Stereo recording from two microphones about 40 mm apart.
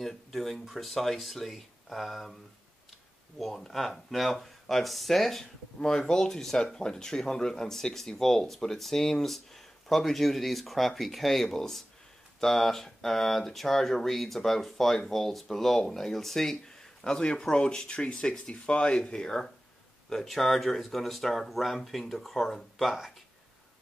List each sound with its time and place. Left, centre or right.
0.0 s speech: centre
3.3 s speech: centre
5.8 s speech: left
17.0 s speech: left
20.1 s speech: centre